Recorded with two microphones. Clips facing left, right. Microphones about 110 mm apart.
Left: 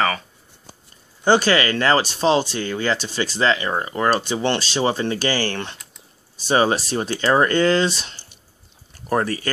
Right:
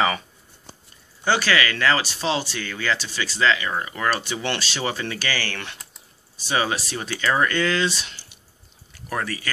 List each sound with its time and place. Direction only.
1.2 s speech: 35° left (ahead or behind)